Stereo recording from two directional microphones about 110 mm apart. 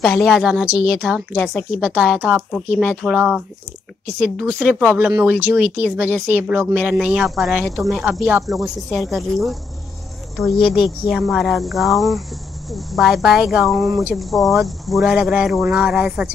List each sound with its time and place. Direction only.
0.0 s speech: 5° left (ahead or behind)
1.8 s speech: 5° right (ahead or behind)
4.6 s speech: 10° right (ahead or behind)